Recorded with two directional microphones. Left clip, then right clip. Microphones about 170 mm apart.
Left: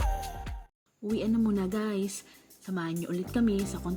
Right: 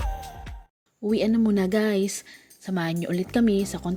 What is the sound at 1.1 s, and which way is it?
Speech, 30° right (ahead or behind).